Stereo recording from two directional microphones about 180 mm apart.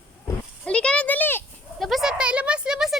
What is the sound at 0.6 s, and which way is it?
Speech, 5° left (ahead or behind).